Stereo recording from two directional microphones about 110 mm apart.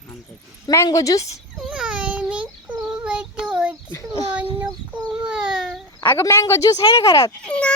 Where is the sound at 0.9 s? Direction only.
30° left (ahead or behind).